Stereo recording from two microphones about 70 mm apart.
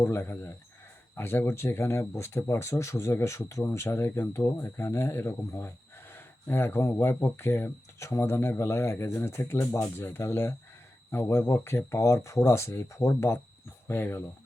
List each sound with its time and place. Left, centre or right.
0.0 s speech: left